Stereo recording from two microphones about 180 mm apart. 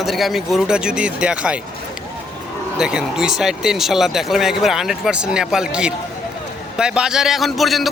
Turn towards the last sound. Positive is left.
turn(degrees=0)  # may be behind; listen again after turning